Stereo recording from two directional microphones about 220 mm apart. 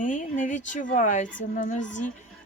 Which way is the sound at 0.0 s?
35° left (ahead or behind).